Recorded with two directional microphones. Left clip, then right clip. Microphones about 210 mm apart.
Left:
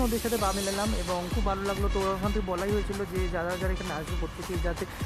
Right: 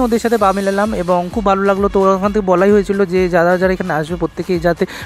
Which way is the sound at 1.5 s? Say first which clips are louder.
Right 18 dB; 35° right (ahead or behind).